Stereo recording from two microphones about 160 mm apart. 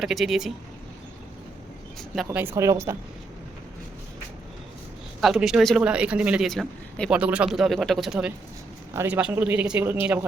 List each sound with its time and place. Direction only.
0.0 s speech: centre (ahead or behind)
2.0 s speech: centre (ahead or behind)
2.4 s speech: 15° right (ahead or behind)
5.2 s speech: 5° right (ahead or behind)
7.1 s speech: 5° right (ahead or behind)
8.9 s speech: 15° right (ahead or behind)